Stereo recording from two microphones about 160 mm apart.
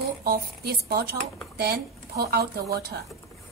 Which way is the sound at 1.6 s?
90° right.